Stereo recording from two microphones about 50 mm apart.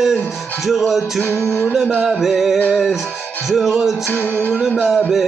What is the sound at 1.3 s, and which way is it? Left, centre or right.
Music, left.